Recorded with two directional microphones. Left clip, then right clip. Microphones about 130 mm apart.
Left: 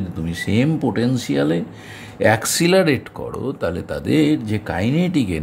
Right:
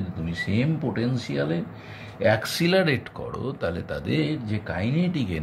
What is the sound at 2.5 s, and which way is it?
Speech, 55° left (ahead or behind).